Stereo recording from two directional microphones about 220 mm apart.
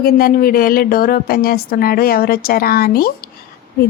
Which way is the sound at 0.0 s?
40° left (ahead or behind).